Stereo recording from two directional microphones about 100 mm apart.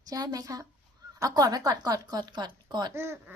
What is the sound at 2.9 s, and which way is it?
Speech, 25° right (ahead or behind).